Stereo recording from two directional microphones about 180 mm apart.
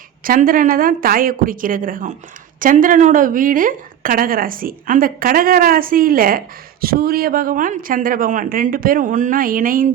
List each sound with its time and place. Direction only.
0.3 s a woman's voice: 50° right (ahead or behind)